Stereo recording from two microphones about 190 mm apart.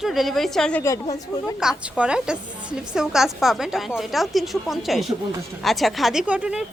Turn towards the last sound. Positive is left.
turn(degrees=-5)  # may be behind; listen again after turning